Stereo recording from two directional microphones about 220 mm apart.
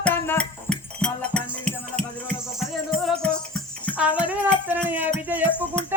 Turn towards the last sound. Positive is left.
turn(degrees=-5)  # may be behind; listen again after turning